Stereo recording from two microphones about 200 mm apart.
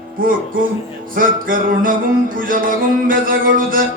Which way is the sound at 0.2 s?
45° right (ahead or behind).